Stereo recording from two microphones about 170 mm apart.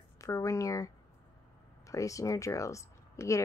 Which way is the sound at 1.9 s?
20° left (ahead or behind).